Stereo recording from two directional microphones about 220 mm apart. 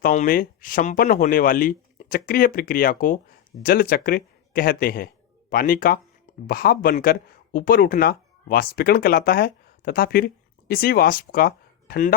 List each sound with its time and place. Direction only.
0.0 s a man's voice: 35° left (ahead or behind)